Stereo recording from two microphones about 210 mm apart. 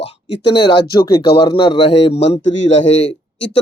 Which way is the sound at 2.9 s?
30° left (ahead or behind).